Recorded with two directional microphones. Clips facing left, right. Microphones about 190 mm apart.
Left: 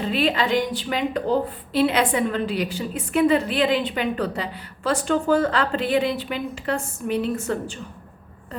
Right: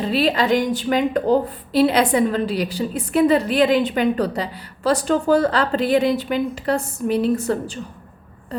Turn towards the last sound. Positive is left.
turn(degrees=-35)  # may be behind; listen again after turning